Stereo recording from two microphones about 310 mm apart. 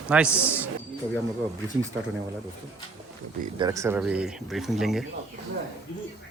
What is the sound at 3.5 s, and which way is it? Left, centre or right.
A man's voice, centre.